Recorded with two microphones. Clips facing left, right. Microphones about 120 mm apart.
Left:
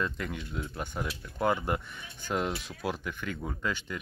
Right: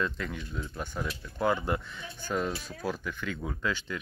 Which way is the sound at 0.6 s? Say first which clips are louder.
Even; 10° left (ahead or behind).